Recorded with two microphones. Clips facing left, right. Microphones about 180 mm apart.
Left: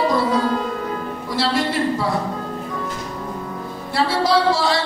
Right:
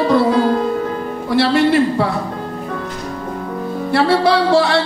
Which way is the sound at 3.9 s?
65° right (ahead or behind).